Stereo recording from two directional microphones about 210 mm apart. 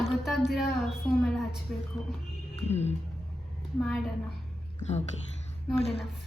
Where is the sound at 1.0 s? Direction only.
5° left (ahead or behind).